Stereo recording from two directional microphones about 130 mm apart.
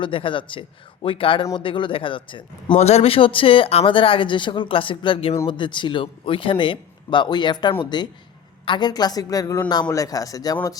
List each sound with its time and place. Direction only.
0.0 s a man's voice: 40° left (ahead or behind)
2.7 s a man's voice: 55° left (ahead or behind); by 10.8 s 30° left (ahead or behind)